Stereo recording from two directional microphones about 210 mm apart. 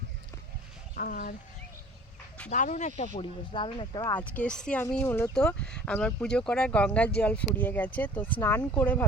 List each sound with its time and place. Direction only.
0.9 s speech: 45° left (ahead or behind)
2.5 s speech: 35° left (ahead or behind); by 4.2 s 20° left (ahead or behind)
4.2 s speech: 5° left (ahead or behind)